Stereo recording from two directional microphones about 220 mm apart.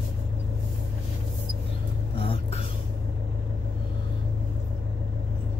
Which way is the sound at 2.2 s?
25° left (ahead or behind).